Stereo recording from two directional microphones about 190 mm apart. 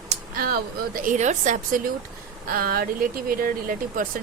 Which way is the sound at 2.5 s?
50° right (ahead or behind).